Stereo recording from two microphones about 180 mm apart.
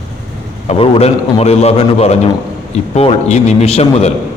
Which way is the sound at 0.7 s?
35° left (ahead or behind).